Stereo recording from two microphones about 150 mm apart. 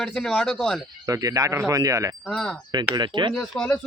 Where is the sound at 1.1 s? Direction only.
25° right (ahead or behind).